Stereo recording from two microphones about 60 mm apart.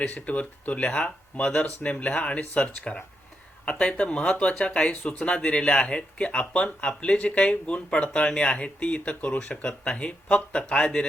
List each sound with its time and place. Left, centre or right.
0.0 s speech: left